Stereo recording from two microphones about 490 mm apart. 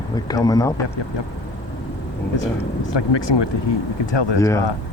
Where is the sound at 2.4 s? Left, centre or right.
Left.